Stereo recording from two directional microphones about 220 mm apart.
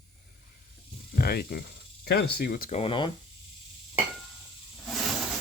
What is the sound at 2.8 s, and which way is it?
Speech, 25° left (ahead or behind).